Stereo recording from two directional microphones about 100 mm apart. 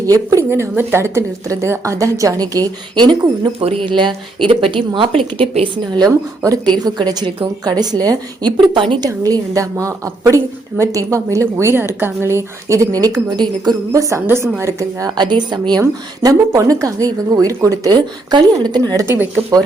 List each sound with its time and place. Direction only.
0.0 s a woman's voice: 35° right (ahead or behind)
3.6 s a woman's voice: 70° right (ahead or behind); by 6.1 s 50° right (ahead or behind)
6.1 s a woman's voice: 35° right (ahead or behind)
8.5 s speech: 55° right (ahead or behind)
9.0 s a woman's voice: 35° right (ahead or behind)
13.9 s a woman's voice: 35° right (ahead or behind)
15.8 s a woman's voice: 30° right (ahead or behind)
17.9 s speech: 45° right (ahead or behind)
19.0 s speech: 25° right (ahead or behind)